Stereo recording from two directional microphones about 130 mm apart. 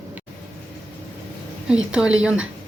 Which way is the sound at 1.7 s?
5° right (ahead or behind).